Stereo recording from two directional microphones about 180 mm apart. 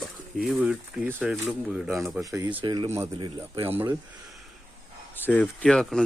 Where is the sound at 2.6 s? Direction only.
30° right (ahead or behind).